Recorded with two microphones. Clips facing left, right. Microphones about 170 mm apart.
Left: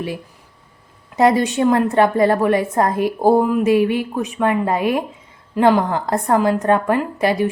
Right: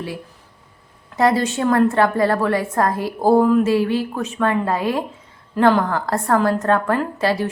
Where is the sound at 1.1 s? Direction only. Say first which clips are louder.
Left 2 dB; 20° left (ahead or behind).